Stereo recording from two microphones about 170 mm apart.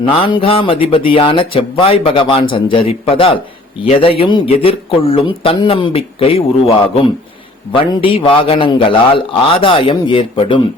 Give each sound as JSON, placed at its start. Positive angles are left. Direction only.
{"t": 0.0, "sound": "speech", "side_deg": 30}